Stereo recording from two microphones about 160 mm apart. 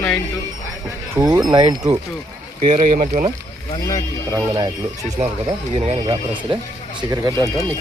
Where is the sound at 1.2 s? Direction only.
25° right (ahead or behind).